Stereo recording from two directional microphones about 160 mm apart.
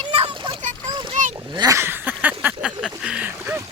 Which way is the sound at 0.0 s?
35° right (ahead or behind).